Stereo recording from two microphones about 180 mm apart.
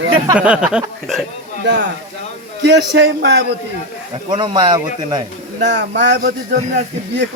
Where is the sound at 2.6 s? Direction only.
70° right (ahead or behind).